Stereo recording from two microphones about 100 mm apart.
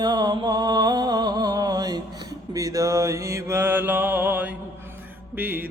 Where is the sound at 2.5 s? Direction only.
35° right (ahead or behind).